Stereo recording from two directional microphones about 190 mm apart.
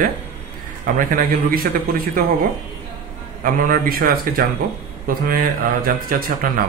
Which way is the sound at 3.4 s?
45° right (ahead or behind).